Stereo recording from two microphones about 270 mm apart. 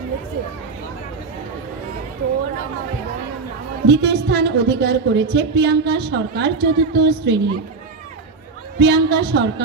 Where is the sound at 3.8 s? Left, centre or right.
Right.